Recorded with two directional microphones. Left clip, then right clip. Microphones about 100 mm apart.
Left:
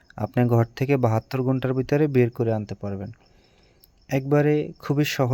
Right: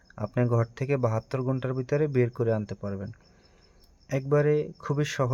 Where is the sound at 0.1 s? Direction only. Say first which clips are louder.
Left 5 dB; 45° left (ahead or behind).